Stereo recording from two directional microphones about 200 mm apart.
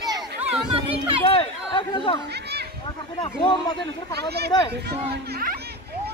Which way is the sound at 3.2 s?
20° left (ahead or behind).